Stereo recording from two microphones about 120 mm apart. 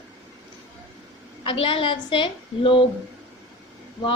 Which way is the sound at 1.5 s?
45° left (ahead or behind).